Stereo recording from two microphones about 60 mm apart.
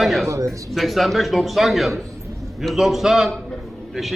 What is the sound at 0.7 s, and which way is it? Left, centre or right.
A man's voice, centre.